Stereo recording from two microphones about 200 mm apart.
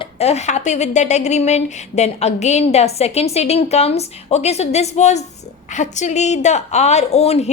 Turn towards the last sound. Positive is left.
turn(degrees=30)  # may be behind; listen again after turning